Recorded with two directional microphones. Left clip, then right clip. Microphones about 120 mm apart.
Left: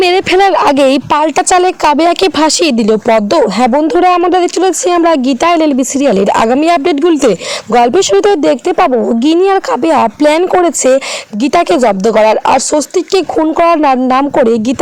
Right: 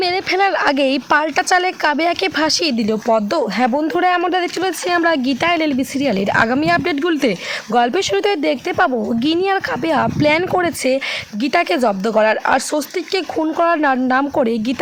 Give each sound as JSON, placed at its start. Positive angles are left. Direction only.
{"t": 0.0, "sound": "speech", "side_deg": 85}